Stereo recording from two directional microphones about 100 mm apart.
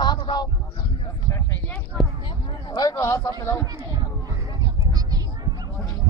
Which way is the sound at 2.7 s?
40° left (ahead or behind).